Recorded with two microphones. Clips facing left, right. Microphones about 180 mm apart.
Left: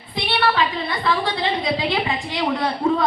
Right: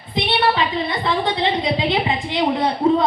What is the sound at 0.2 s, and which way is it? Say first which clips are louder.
A woman's voice: right 2 dB; 20° right (ahead or behind).